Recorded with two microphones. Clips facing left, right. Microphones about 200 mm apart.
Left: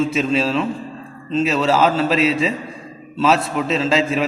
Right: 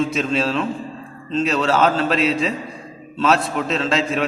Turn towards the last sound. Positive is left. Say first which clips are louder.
# left 2 dB
turn(degrees=5)  # may be behind; listen again after turning